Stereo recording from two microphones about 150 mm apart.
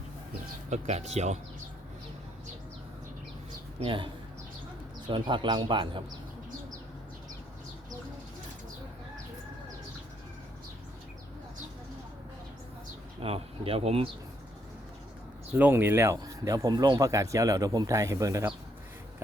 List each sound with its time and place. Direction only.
0.7 s speech: 45° right (ahead or behind)
3.8 s speech: 35° right (ahead or behind)
13.2 s speech: 40° right (ahead or behind)
15.5 s speech: 15° right (ahead or behind)